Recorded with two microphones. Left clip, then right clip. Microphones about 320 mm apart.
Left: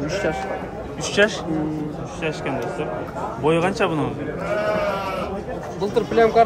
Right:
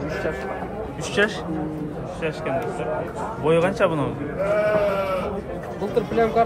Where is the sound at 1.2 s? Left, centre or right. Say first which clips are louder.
Left 3 dB; centre.